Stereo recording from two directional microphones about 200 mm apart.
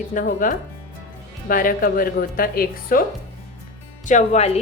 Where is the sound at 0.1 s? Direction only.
40° left (ahead or behind).